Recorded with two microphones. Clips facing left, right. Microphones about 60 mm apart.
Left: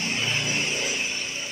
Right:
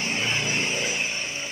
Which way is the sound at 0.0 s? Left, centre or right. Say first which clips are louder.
Right 1 dB; right.